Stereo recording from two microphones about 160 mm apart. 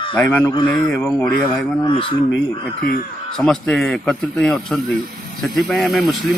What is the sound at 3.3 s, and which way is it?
A man's voice, centre (ahead or behind).